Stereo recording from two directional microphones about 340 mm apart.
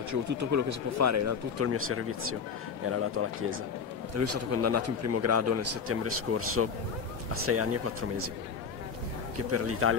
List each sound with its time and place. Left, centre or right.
0.1 s a man's voice: right
9.5 s speech: right